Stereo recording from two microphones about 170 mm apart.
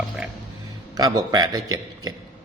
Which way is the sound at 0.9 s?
20° right (ahead or behind).